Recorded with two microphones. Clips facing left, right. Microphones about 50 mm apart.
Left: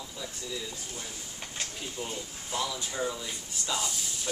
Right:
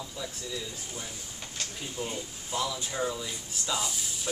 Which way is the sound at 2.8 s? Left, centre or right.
Centre.